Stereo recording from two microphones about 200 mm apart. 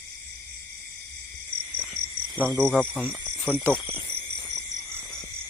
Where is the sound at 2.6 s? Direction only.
5° left (ahead or behind).